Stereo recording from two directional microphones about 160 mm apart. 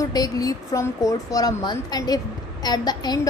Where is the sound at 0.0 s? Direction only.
25° left (ahead or behind).